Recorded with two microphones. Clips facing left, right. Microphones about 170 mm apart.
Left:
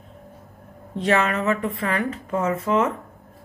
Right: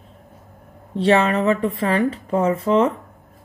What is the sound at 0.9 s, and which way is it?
Speech, 30° right (ahead or behind).